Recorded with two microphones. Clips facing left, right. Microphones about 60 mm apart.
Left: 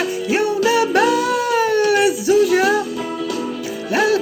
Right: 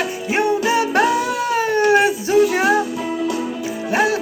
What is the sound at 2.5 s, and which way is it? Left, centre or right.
Music, right.